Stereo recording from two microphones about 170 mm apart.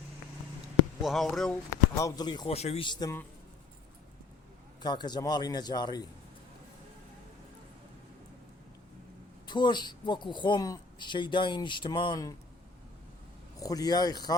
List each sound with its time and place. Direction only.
1.0 s speech: centre (ahead or behind)
2.0 s speech: 20° left (ahead or behind)
2.6 s speech: 35° left (ahead or behind)
4.8 s speech: 25° left (ahead or behind)
9.5 s speech: 25° left (ahead or behind)
13.6 s speech: 20° left (ahead or behind)